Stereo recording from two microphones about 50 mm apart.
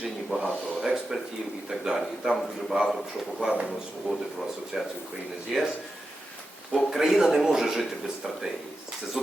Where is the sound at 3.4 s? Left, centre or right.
Centre.